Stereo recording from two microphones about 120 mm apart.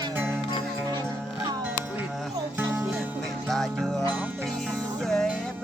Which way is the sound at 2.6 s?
20° right (ahead or behind).